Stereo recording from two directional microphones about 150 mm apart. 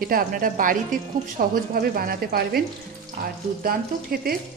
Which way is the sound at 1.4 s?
75° right (ahead or behind).